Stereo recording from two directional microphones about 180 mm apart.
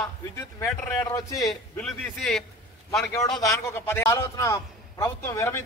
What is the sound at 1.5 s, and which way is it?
Speech, 5° left (ahead or behind).